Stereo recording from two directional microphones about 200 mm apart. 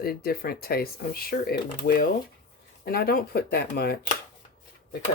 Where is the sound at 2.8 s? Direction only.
50° left (ahead or behind).